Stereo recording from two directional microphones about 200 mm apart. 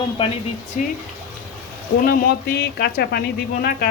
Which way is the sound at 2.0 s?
50° left (ahead or behind).